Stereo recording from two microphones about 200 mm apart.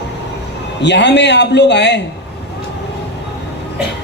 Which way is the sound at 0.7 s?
60° left (ahead or behind).